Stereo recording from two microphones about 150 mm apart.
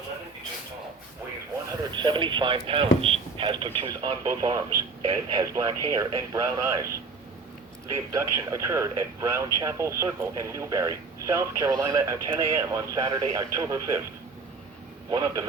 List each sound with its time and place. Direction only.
2.0 s speech: 30° right (ahead or behind)
3.0 s radio: 40° right (ahead or behind)
3.8 s speech: 25° right (ahead or behind)
7.9 s speech: 20° right (ahead or behind)
15.1 s speech: 25° right (ahead or behind)